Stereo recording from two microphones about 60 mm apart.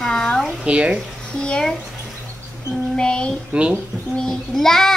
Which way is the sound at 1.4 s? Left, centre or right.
Centre.